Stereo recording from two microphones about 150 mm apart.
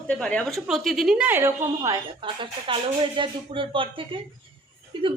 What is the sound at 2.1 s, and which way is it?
A woman's voice, 35° right (ahead or behind).